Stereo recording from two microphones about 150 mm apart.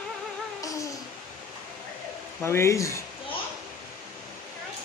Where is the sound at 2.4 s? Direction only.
15° left (ahead or behind).